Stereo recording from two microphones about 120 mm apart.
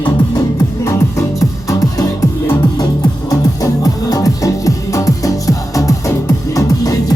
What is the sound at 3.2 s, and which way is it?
Music, 30° left (ahead or behind).